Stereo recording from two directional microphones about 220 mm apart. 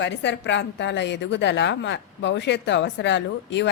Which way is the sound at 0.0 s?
50° left (ahead or behind).